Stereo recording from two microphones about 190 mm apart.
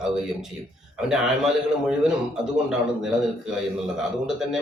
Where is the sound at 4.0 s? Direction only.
5° right (ahead or behind).